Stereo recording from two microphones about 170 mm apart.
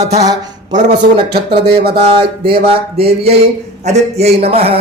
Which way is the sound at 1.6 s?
65° right (ahead or behind).